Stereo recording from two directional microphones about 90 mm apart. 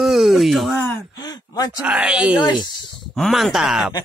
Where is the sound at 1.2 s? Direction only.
45° left (ahead or behind).